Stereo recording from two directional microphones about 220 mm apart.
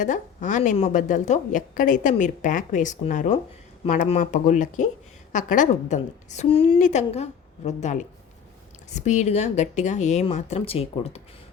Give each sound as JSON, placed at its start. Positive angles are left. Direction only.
{"t": 0.0, "sound": "a woman's voice", "side_deg": 35}